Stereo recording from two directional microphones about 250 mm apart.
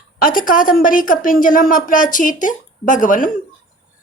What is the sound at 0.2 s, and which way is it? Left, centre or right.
A woman's voice, left.